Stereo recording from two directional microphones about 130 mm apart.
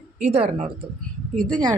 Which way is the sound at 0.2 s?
55° right (ahead or behind).